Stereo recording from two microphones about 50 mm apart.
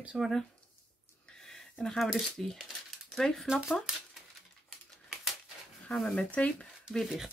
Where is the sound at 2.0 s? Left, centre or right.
Centre.